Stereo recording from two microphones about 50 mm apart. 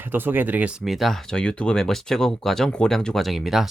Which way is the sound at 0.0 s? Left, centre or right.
Right.